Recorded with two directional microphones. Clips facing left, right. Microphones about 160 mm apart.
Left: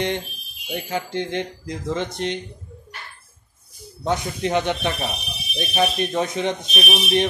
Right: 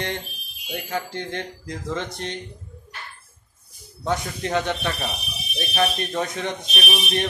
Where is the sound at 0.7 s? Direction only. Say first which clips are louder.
Left 2 dB; 20° left (ahead or behind).